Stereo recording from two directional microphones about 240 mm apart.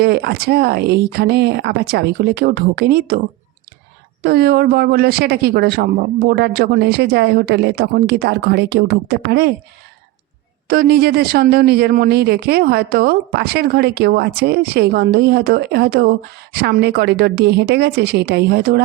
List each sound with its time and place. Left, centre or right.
0.0 s speech: right
4.2 s speech: right
10.7 s speech: right